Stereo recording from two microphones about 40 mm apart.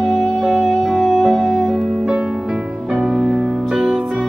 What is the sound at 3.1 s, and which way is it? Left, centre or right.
Music, centre.